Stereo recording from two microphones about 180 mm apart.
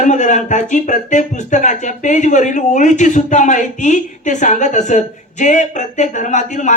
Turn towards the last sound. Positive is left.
turn(degrees=45)  # may be behind; listen again after turning